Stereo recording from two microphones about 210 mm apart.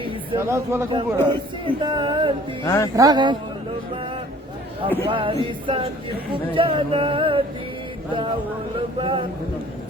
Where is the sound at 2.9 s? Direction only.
20° right (ahead or behind).